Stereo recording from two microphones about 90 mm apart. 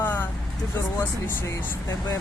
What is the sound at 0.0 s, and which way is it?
Vehicle, 25° left (ahead or behind).